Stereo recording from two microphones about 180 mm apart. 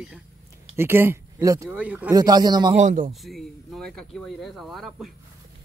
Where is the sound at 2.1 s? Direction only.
20° right (ahead or behind).